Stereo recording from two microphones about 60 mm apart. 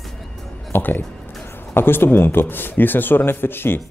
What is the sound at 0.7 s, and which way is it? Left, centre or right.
A man's voice, left.